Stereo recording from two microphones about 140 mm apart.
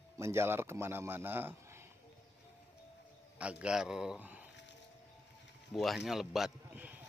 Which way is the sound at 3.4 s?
10° right (ahead or behind).